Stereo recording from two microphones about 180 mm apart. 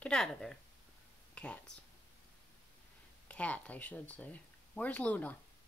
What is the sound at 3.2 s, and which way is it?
Speech, 10° left (ahead or behind).